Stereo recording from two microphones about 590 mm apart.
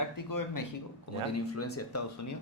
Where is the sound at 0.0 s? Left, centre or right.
Left.